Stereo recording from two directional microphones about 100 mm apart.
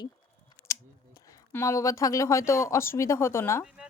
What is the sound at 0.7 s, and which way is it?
Scissors, 30° left (ahead or behind).